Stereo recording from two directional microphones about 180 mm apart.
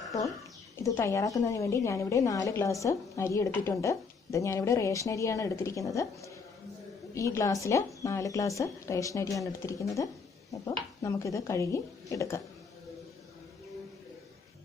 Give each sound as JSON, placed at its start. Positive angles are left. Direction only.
{"t": 0.8, "sound": "speech", "side_deg": 15}